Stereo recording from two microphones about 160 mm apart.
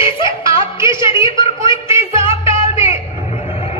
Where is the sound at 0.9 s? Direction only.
30° left (ahead or behind).